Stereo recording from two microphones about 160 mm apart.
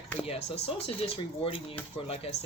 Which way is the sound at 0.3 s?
40° left (ahead or behind).